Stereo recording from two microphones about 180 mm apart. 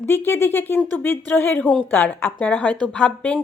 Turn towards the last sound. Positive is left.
turn(degrees=5)  # may be behind; listen again after turning